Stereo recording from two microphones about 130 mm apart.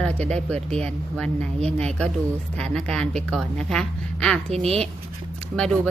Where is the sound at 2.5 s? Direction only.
5° left (ahead or behind).